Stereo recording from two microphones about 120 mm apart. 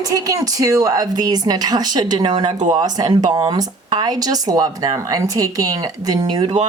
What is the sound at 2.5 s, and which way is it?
Speech, 90° right.